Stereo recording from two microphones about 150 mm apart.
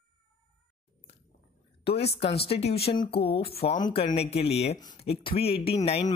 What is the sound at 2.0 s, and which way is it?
Speech, 40° left (ahead or behind).